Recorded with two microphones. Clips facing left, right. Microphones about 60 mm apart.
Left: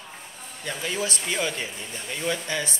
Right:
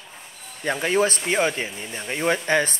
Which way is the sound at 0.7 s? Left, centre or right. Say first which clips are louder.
Right 8 dB; right.